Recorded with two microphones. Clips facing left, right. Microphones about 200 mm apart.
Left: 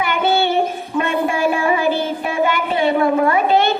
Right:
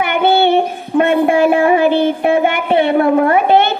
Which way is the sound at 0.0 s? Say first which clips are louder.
Right 5 dB; 60° right (ahead or behind).